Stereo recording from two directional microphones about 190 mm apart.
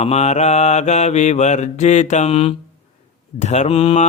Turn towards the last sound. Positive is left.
turn(degrees=30)  # may be behind; listen again after turning